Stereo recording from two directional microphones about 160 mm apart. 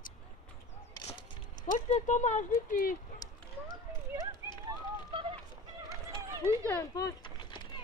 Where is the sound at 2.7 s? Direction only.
60° left (ahead or behind).